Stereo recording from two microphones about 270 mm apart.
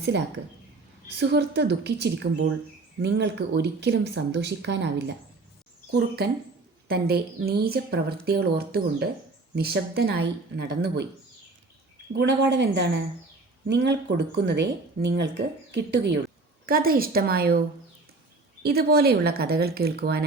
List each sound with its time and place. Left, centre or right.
1.2 s speech: right
6.2 s speech: right
12.1 s speech: right
18.6 s speech: right